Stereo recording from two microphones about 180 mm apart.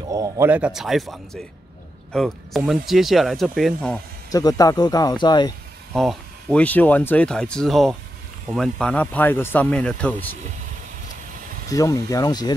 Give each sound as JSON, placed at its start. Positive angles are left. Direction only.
{"t": 0.1, "sound": "a man's voice", "side_deg": -20}
{"t": 0.5, "sound": "speech", "side_deg": -5}
{"t": 4.3, "sound": "speech", "side_deg": 20}
{"t": 5.9, "sound": "speech", "side_deg": 5}
{"t": 11.7, "sound": "speech", "side_deg": 20}